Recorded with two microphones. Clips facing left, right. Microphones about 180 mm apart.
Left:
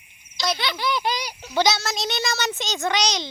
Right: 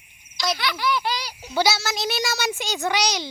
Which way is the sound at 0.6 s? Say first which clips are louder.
Right 1 dB; 25° left (ahead or behind).